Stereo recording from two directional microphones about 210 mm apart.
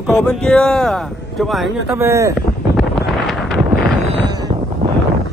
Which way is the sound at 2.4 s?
Centre (ahead or behind).